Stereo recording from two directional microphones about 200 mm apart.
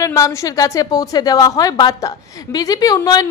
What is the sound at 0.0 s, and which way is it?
A woman's voice, 15° left (ahead or behind).